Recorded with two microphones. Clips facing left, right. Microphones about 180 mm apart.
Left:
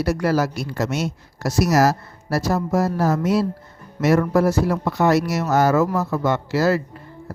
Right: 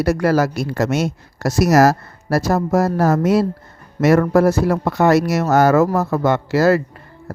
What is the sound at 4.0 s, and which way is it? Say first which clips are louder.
Speech: right 4 dB; 80° right.